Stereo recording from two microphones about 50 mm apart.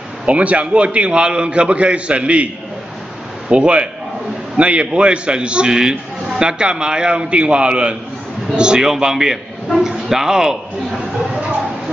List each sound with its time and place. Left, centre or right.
0.2 s a man's voice: right; by 10.6 s centre